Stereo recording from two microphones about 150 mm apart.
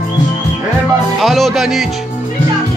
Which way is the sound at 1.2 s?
Centre (ahead or behind).